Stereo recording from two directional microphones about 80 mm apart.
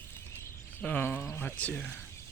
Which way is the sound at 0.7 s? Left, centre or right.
Left.